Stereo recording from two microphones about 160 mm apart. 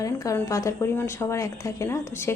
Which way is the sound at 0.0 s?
20° left (ahead or behind).